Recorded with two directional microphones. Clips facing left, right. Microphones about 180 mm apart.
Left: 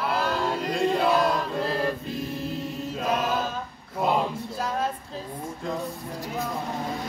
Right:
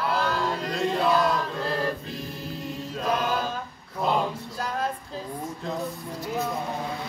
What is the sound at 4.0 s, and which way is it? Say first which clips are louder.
Male singing: left 1 dB; 5° left (ahead or behind).